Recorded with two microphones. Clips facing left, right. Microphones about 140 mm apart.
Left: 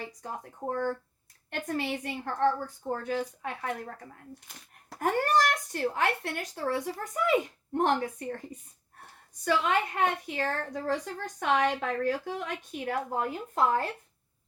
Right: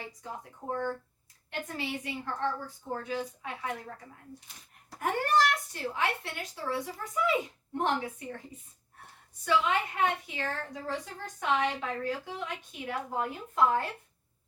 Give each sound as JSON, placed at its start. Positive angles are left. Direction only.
{"t": 0.2, "sound": "a woman's voice", "side_deg": 50}